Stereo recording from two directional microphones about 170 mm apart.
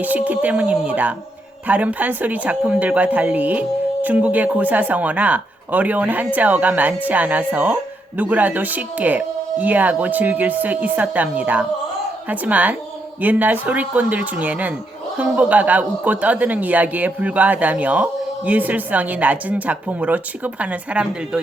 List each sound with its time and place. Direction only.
0.0 s speech: 10° right (ahead or behind)